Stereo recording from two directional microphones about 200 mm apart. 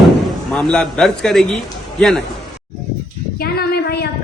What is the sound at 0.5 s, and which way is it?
A man's voice, 5° left (ahead or behind).